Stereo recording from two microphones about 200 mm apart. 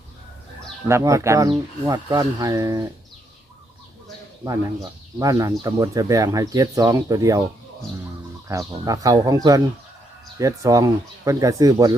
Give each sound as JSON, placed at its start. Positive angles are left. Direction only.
{"t": 0.9, "sound": "speech", "side_deg": -15}
{"t": 4.4, "sound": "speech", "side_deg": -15}
{"t": 8.4, "sound": "speech", "side_deg": -15}